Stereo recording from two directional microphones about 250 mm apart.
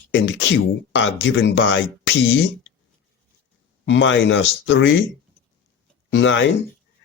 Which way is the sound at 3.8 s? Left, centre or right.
Left.